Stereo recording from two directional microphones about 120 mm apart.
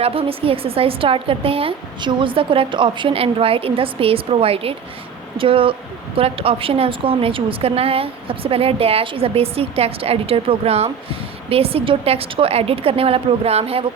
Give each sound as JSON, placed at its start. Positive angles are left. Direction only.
{"t": 0.0, "sound": "a woman's voice", "side_deg": -50}